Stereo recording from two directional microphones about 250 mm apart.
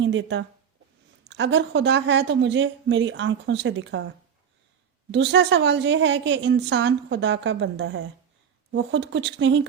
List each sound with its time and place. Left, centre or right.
0.0 s a woman's voice: right
5.1 s a woman's voice: right